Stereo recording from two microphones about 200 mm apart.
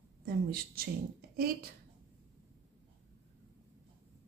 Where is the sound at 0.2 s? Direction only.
50° right (ahead or behind).